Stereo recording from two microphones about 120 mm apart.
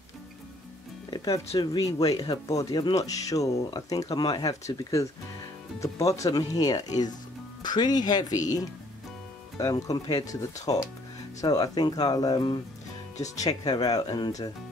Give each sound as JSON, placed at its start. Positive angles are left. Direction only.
{"t": 1.1, "sound": "speech", "side_deg": 30}